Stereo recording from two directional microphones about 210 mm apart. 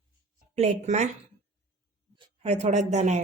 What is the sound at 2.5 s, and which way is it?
Speech, 30° right (ahead or behind).